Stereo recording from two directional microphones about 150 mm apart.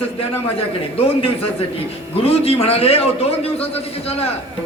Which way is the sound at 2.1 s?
40° left (ahead or behind).